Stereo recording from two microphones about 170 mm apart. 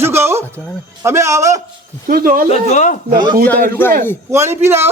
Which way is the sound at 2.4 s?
40° left (ahead or behind).